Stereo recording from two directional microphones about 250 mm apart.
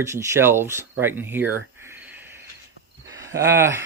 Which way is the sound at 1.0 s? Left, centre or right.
Centre.